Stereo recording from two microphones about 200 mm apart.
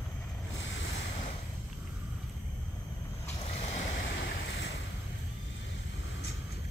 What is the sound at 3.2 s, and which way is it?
Vehicle, 30° left (ahead or behind).